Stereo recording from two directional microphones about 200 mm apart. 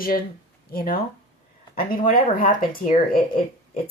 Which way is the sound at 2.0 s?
45° left (ahead or behind).